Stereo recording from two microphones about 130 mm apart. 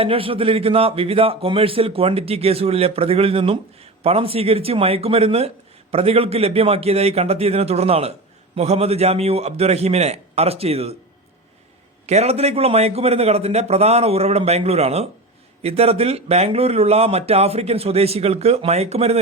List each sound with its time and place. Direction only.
0.0 s a man's voice: 45° right (ahead or behind)
12.0 s a man's voice: 55° right (ahead or behind)